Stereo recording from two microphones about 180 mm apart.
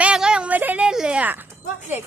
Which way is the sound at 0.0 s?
5° right (ahead or behind).